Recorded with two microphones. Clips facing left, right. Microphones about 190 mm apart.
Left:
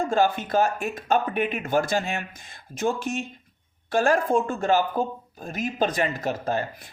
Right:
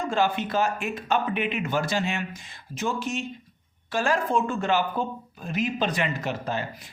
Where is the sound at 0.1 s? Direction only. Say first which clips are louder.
Even; 45° left (ahead or behind).